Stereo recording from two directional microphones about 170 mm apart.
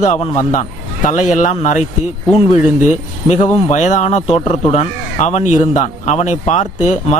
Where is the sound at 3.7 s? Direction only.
45° left (ahead or behind).